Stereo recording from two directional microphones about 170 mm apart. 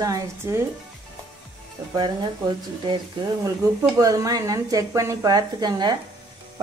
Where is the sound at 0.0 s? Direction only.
20° right (ahead or behind).